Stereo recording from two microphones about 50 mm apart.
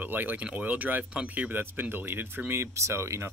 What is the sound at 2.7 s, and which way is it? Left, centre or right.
Speech, right.